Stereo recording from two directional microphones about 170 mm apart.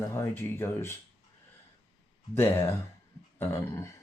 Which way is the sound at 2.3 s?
15° left (ahead or behind).